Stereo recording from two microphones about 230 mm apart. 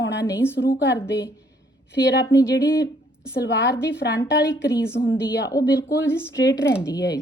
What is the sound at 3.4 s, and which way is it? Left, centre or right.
A woman's voice, left.